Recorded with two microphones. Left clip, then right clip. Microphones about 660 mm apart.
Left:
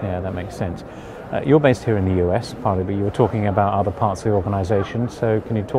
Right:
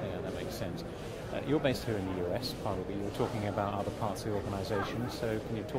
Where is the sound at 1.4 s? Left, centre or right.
Left.